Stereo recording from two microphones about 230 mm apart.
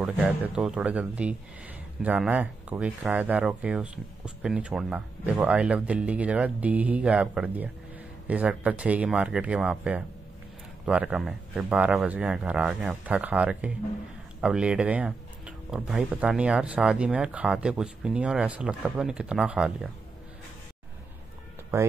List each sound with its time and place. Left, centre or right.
0.0 s speech: centre